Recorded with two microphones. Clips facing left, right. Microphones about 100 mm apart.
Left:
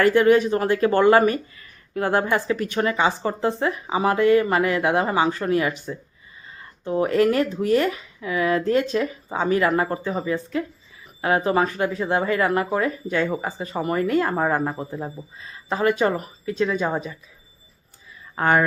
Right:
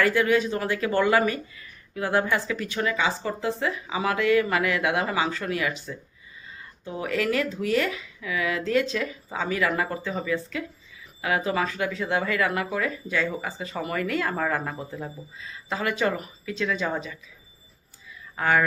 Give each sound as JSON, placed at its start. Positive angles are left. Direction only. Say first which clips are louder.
{"t": 0.0, "sound": "speech", "louder": "left 6 dB", "side_deg": 45}
{"t": 6.8, "sound": "speech", "louder": "left 8 dB", "side_deg": 40}
{"t": 18.3, "sound": "speech", "louder": "left 3 dB", "side_deg": 40}